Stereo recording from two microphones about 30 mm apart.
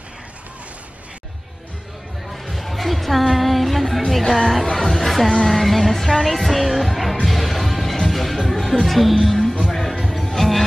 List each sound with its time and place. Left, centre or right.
2.5 s music: centre
4.2 s speech: centre
4.5 s music: centre
10.2 s music: centre